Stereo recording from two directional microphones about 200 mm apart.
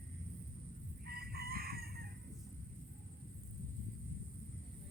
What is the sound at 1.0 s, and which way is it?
Chicken, 50° right (ahead or behind).